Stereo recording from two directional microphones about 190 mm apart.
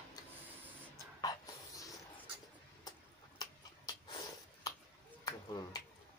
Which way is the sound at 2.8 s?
20° left (ahead or behind).